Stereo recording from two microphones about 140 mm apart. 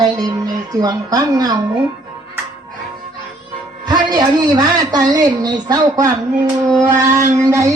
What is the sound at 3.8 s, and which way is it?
A man's voice, 30° right (ahead or behind).